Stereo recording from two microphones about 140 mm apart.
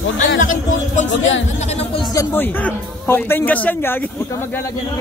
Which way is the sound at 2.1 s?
15° left (ahead or behind).